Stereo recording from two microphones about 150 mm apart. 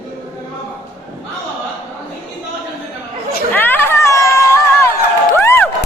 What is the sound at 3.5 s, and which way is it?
Crowd, 15° left (ahead or behind).